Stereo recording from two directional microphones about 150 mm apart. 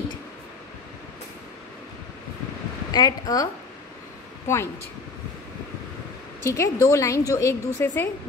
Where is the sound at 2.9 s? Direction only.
25° left (ahead or behind).